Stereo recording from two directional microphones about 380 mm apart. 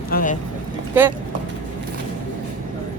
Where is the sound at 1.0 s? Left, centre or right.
Centre.